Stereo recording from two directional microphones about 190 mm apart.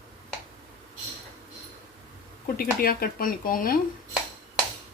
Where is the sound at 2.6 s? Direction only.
50° left (ahead or behind).